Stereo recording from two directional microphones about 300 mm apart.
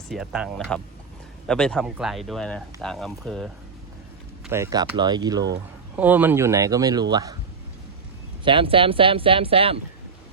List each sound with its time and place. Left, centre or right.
0.1 s a man's voice: centre
8.4 s speech: centre